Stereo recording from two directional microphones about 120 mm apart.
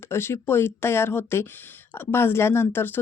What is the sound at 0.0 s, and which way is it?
Speech, 20° left (ahead or behind).